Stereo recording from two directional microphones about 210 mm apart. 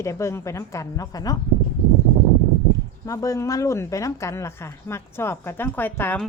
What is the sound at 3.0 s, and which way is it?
Speech, 15° left (ahead or behind).